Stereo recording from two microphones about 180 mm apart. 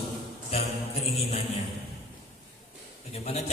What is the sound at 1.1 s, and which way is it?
Music, 30° left (ahead or behind).